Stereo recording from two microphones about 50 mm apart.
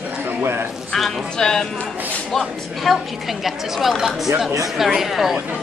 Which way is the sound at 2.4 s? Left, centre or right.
Centre.